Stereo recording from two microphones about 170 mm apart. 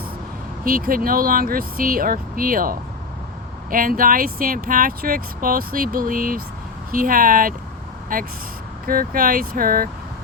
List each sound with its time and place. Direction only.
0.6 s speech: 55° right (ahead or behind)